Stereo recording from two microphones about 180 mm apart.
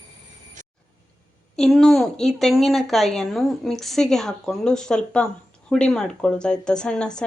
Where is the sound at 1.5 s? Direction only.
Centre (ahead or behind).